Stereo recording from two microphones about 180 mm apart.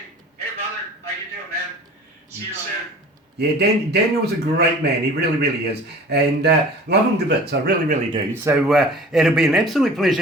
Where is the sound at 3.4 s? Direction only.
65° right (ahead or behind).